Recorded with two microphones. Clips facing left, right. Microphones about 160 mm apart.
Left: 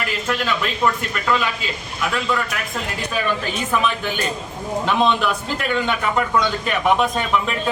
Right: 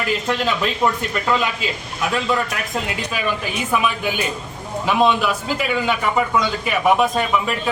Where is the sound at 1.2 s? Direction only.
20° right (ahead or behind).